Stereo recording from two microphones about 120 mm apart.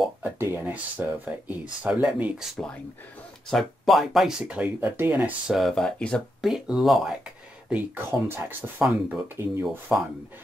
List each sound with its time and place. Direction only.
0.2 s speech: 20° right (ahead or behind)
5.5 s speech: centre (ahead or behind)
7.7 s speech: 20° right (ahead or behind)
9.7 s speech: centre (ahead or behind)